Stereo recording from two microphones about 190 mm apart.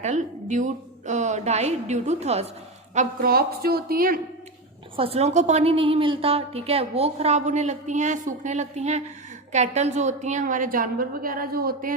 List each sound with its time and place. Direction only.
0.0 s a woman's voice: 40° right (ahead or behind)
4.9 s a woman's voice: 30° right (ahead or behind); by 11.9 s 50° right (ahead or behind)